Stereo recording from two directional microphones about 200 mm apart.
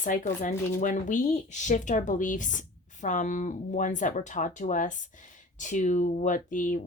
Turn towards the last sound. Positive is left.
turn(degrees=40)  # may be behind; listen again after turning